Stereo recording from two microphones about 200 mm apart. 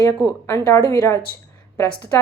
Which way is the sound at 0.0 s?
15° left (ahead or behind).